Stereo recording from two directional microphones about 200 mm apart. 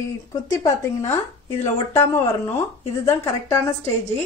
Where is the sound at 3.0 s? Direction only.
15° left (ahead or behind).